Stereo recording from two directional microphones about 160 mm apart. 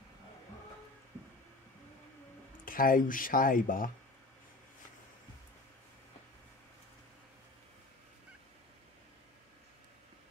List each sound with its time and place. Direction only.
2.6 s speech: 60° left (ahead or behind)